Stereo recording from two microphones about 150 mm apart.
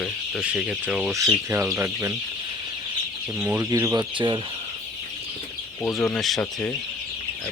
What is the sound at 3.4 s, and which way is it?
Speech, 15° right (ahead or behind).